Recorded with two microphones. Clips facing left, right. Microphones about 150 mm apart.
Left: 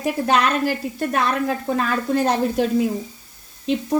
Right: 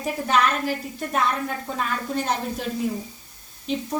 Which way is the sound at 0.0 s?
85° left.